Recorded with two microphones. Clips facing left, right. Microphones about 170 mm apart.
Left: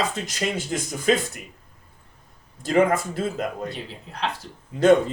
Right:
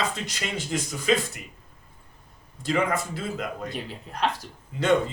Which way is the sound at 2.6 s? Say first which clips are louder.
Left 6 dB; 45° left (ahead or behind).